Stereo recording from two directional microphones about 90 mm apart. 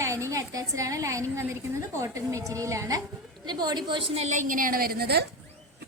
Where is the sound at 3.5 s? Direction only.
55° right (ahead or behind).